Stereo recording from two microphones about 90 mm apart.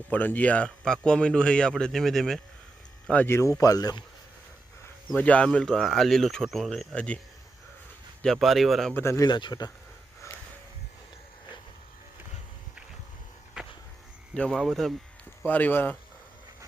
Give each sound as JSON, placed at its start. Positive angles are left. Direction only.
{"t": 0.1, "sound": "a man's voice", "side_deg": 20}
{"t": 3.2, "sound": "speech", "side_deg": 30}
{"t": 3.6, "sound": "speech", "side_deg": 45}
{"t": 5.1, "sound": "a man's voice", "side_deg": 15}
{"t": 8.2, "sound": "speech", "side_deg": 0}
{"t": 9.0, "sound": "speech", "side_deg": 30}
{"t": 9.2, "sound": "speech", "side_deg": 55}
{"t": 13.6, "sound": "a sound", "side_deg": -10}
{"t": 14.5, "sound": "speech", "side_deg": 5}
{"t": 15.4, "sound": "speech", "side_deg": 20}